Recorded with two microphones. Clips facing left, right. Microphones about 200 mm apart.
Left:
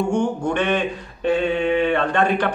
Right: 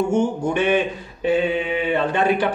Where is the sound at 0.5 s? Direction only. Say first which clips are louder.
Right 2 dB; 5° right (ahead or behind).